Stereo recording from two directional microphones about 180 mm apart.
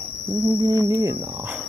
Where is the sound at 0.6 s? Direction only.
20° right (ahead or behind).